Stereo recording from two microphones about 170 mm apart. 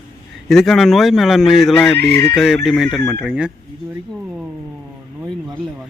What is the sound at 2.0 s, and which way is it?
Speech, 75° right (ahead or behind).